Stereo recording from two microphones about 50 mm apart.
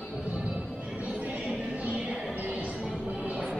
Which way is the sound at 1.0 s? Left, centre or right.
Right.